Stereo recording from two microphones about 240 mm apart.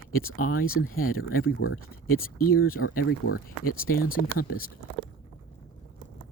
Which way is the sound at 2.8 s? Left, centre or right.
Left.